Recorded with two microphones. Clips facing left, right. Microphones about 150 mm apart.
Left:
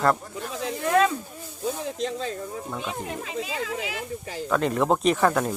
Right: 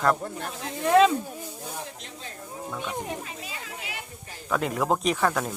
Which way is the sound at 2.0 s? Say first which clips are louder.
Left 14 dB; 90° left.